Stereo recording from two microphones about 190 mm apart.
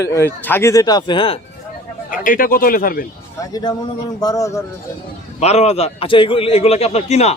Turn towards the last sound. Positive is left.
turn(degrees=35)  # may be behind; listen again after turning